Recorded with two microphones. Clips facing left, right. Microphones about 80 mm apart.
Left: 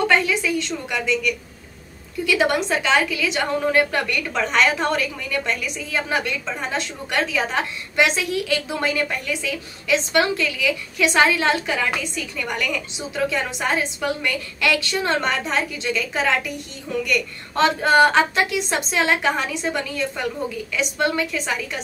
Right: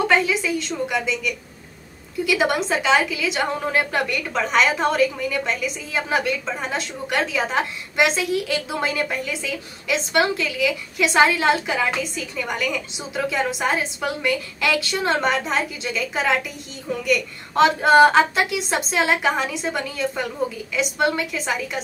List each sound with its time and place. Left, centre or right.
0.0 s a woman's voice: centre
2.3 s a woman's voice: centre